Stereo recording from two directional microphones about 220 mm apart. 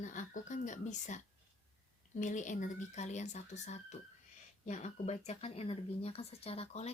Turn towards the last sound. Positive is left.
turn(degrees=30)  # may be behind; listen again after turning